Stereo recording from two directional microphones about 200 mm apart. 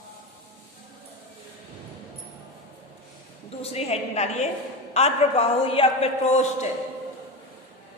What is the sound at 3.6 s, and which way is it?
A man's voice, 30° left (ahead or behind).